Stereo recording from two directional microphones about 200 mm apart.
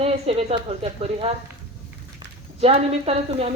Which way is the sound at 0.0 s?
30° right (ahead or behind).